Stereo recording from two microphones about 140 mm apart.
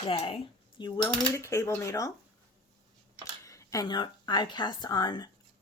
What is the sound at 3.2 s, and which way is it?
Speech, 25° left (ahead or behind).